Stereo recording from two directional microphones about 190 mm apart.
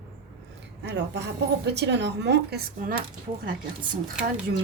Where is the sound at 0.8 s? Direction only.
65° right (ahead or behind).